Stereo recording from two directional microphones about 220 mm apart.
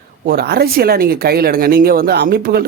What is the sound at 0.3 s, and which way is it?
Speech, 45° right (ahead or behind).